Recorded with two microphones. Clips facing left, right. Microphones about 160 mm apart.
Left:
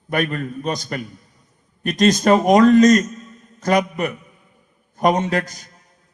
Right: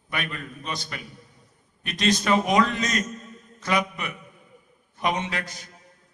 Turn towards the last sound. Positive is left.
turn(degrees=45)  # may be behind; listen again after turning